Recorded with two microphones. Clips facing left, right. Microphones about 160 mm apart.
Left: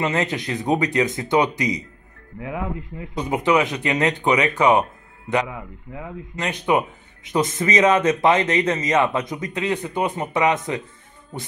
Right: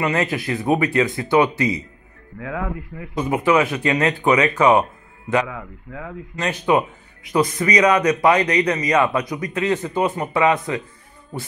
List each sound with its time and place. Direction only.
0.0 s speech: 20° left (ahead or behind)